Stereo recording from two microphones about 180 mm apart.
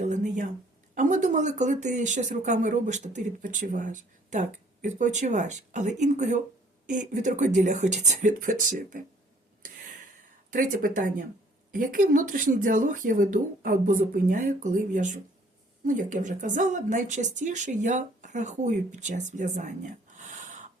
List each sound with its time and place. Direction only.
0.0 s a sound: 40° right (ahead or behind)
0.9 s speech: 45° right (ahead or behind)
10.5 s speech: 50° right (ahead or behind)